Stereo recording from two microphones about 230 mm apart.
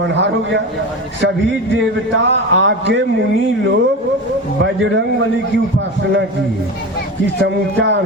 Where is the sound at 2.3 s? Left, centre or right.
Right.